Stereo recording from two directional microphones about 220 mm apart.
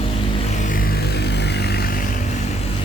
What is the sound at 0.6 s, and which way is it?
Vehicle, 40° left (ahead or behind).